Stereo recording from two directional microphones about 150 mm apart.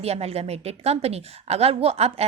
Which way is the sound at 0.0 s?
45° right (ahead or behind).